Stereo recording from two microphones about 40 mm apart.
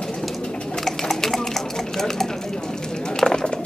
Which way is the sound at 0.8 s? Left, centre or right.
Centre.